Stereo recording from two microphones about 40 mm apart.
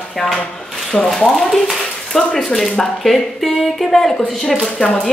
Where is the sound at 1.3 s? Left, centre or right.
Centre.